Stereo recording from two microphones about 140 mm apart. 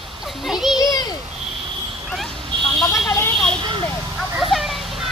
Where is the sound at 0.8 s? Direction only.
25° left (ahead or behind).